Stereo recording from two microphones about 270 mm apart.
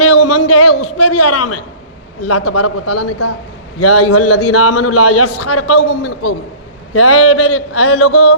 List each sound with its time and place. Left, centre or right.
0.0 s a sound: left
2.2 s a man's voice: left
6.9 s a man's voice: left